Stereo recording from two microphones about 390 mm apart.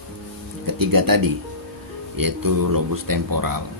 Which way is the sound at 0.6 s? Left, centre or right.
Right.